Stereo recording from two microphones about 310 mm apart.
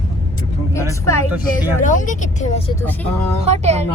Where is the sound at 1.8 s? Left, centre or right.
Left.